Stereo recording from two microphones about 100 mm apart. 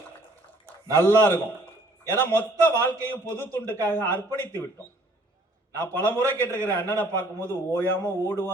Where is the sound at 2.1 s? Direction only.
20° left (ahead or behind).